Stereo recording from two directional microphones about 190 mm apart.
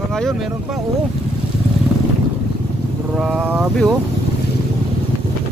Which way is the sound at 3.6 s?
Centre (ahead or behind).